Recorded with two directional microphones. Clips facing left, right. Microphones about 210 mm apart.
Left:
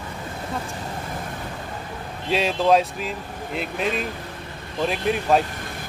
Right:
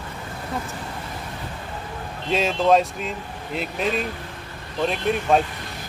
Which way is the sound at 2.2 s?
Centre (ahead or behind).